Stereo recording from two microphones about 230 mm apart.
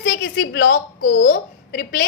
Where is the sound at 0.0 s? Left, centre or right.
Left.